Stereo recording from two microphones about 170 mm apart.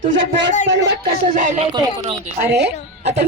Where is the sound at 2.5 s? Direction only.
80° right.